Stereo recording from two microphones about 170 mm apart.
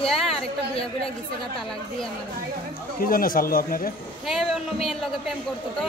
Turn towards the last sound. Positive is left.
turn(degrees=0)  # may be behind; listen again after turning